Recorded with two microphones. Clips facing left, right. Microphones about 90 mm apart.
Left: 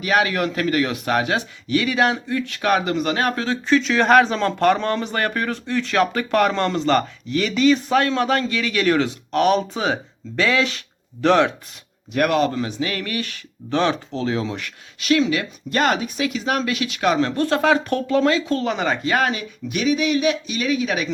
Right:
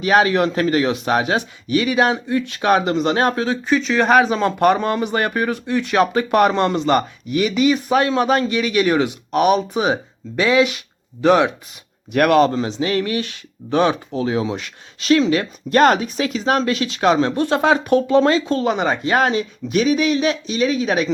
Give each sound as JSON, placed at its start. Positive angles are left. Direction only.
{"t": 0.0, "sound": "speech", "side_deg": -30}
{"t": 3.4, "sound": "speech", "side_deg": -10}
{"t": 12.1, "sound": "speech", "side_deg": -65}
{"t": 12.5, "sound": "speech", "side_deg": -25}
{"t": 14.9, "sound": "speech", "side_deg": -35}
{"t": 17.2, "sound": "speech", "side_deg": -20}